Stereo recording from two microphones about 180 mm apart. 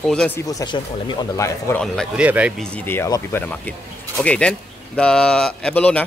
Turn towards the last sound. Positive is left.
turn(degrees=5)  # may be behind; listen again after turning